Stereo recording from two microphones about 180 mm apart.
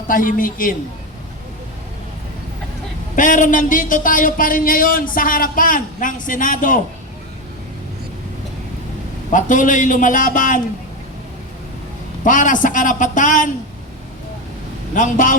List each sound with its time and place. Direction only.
0.1 s a man's voice: 50° left (ahead or behind)
3.2 s a man's voice: 45° left (ahead or behind)
9.3 s a man's voice: 45° left (ahead or behind)
12.2 s a man's voice: 45° left (ahead or behind)
14.9 s a man's voice: 45° left (ahead or behind)